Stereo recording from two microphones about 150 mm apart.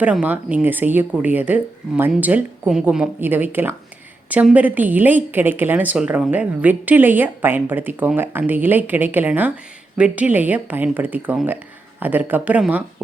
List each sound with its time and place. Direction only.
0.0 s speech: 10° right (ahead or behind)